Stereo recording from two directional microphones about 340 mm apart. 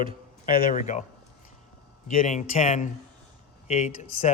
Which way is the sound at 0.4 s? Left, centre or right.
Left.